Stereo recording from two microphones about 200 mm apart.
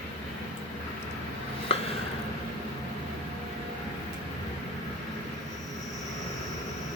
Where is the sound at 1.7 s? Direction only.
30° left (ahead or behind).